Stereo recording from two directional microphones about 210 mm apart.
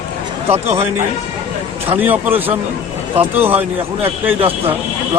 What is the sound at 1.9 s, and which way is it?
Speech, 10° right (ahead or behind).